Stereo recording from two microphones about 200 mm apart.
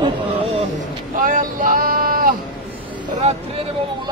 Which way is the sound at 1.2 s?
40° right (ahead or behind).